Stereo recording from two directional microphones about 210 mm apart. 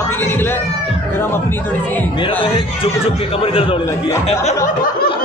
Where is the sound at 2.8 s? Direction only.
25° left (ahead or behind).